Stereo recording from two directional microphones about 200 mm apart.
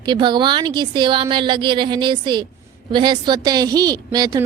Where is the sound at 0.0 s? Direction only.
20° right (ahead or behind).